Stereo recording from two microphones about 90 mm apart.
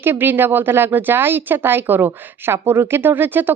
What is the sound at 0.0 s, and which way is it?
Speech, 25° right (ahead or behind).